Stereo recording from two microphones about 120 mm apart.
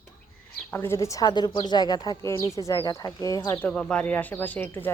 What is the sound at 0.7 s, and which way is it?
Speech, 20° left (ahead or behind).